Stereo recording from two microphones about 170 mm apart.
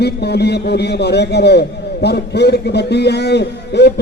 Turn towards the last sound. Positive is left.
turn(degrees=85)